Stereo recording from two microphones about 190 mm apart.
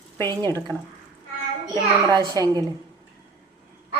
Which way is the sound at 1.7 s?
20° right (ahead or behind).